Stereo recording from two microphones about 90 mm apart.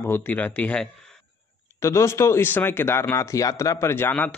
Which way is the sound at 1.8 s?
30° left (ahead or behind).